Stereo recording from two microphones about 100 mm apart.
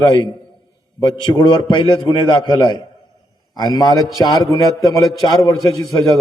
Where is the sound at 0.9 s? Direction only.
45° left (ahead or behind).